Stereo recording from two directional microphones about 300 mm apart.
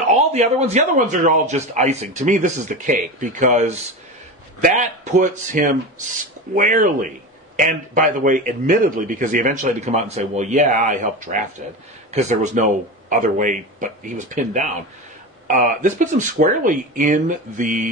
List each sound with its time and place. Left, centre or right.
0.1 s a man's voice: right